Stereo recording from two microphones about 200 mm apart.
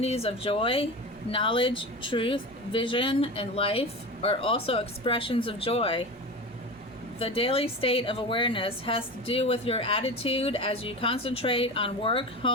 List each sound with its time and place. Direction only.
0.0 s a woman's voice: 30° left (ahead or behind)
7.2 s a woman's voice: 25° left (ahead or behind)